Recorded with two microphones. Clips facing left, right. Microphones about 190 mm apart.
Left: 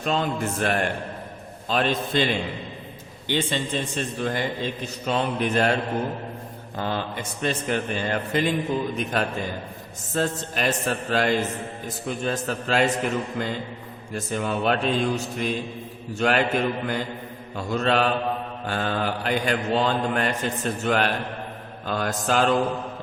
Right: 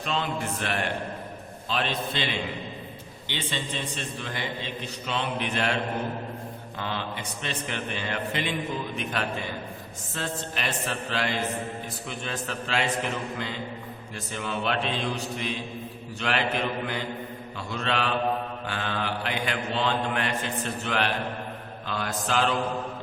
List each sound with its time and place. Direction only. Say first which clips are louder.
0.0 s a man's voice: left 5 dB; 45° left (ahead or behind)
14.1 s a man's voice: left 7 dB; 45° left (ahead or behind)